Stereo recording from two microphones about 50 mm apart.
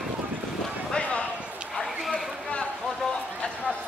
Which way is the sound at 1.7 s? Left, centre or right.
Centre.